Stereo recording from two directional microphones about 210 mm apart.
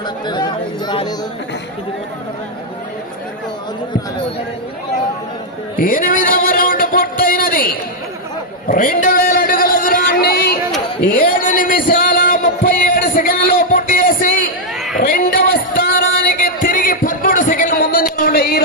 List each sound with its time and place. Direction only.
0.3 s chatter: 20° left (ahead or behind)
5.8 s a sound: 40° left (ahead or behind)
11.1 s music: 40° left (ahead or behind)